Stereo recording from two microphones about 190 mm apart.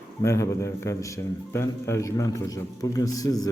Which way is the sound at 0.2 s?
15° left (ahead or behind).